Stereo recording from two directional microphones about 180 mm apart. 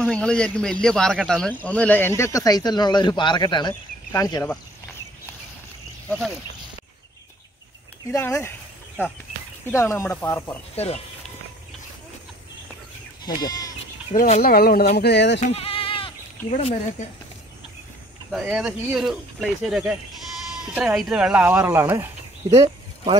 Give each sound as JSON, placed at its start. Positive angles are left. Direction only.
{"t": 0.0, "sound": "speech", "side_deg": 5}
{"t": 8.1, "sound": "speech", "side_deg": 15}
{"t": 9.7, "sound": "speech", "side_deg": 15}
{"t": 13.2, "sound": "goat", "side_deg": 20}
{"t": 14.1, "sound": "speech", "side_deg": 50}
{"t": 15.0, "sound": "speech", "side_deg": 70}
{"t": 15.4, "sound": "bleat", "side_deg": 35}
{"t": 18.3, "sound": "speech", "side_deg": -5}